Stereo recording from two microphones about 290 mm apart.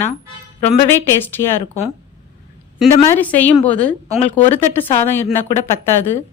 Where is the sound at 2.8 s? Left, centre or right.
Centre.